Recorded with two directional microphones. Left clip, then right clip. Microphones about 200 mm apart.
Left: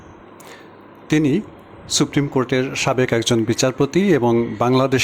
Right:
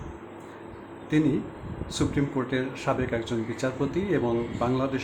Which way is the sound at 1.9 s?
45° left (ahead or behind).